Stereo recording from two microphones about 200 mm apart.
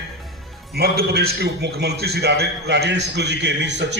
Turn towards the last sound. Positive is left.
turn(degrees=-60)  # may be behind; listen again after turning